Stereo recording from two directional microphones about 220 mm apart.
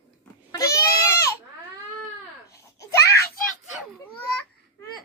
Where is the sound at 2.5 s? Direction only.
15° left (ahead or behind).